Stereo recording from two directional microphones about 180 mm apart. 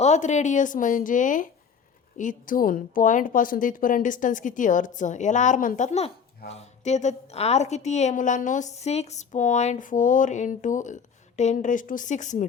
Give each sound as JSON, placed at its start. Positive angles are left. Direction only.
{"t": 0.0, "sound": "a woman's voice", "side_deg": 40}